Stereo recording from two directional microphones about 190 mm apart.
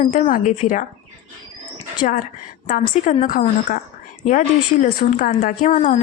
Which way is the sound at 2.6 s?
45° left (ahead or behind).